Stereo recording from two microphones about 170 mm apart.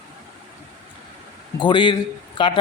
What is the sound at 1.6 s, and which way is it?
Speech, 30° left (ahead or behind).